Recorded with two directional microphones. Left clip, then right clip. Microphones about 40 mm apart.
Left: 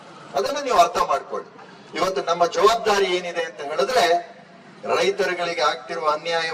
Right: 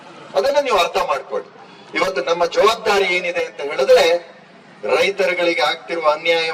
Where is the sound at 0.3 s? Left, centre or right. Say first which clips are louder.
Right 3 dB; right.